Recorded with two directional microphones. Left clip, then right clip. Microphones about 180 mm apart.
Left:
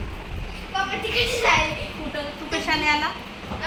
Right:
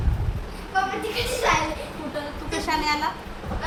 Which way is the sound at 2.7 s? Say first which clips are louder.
Left 2 dB; 25° left (ahead or behind).